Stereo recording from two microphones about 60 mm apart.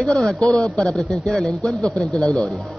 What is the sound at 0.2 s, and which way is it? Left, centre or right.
Speech, centre.